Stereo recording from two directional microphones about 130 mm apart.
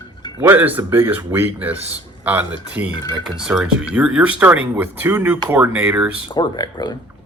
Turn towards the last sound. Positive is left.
turn(degrees=30)  # may be behind; listen again after turning